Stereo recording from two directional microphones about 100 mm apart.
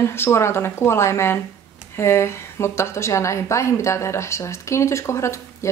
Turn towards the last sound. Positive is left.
turn(degrees=30)  # may be behind; listen again after turning